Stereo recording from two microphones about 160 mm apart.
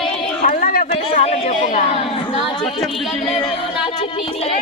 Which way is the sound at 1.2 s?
45° left (ahead or behind).